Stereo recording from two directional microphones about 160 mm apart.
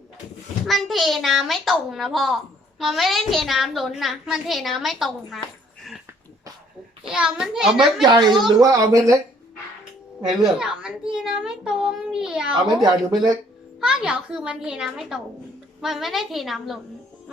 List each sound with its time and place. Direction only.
0.7 s a child's voice: centre (ahead or behind)
7.1 s a child's voice: 5° right (ahead or behind)
8.0 s speech: 25° right (ahead or behind)
10.4 s a child's voice: 5° right (ahead or behind)
12.8 s speech: 25° right (ahead or behind)
13.8 s a child's voice: 5° right (ahead or behind)